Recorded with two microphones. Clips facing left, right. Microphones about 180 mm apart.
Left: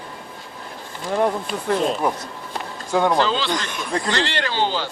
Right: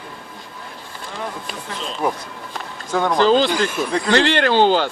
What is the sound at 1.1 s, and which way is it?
Speech, 50° left (ahead or behind).